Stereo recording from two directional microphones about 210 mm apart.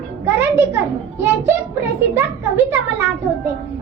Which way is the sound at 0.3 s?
10° right (ahead or behind).